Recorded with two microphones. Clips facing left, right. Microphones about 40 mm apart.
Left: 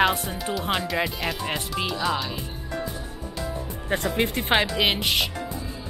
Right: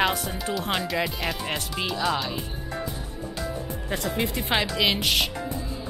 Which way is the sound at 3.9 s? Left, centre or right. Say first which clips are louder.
Left 3 dB; left.